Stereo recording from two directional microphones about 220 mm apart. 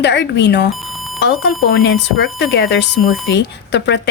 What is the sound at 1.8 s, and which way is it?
Speech, 60° left (ahead or behind).